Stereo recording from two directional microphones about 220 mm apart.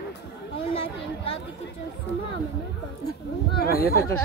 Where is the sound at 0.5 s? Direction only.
25° left (ahead or behind).